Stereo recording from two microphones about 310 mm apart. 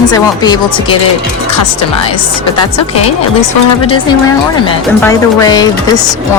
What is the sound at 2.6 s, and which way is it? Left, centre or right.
Speech, centre.